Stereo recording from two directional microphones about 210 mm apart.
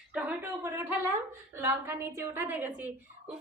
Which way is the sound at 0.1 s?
5° right (ahead or behind).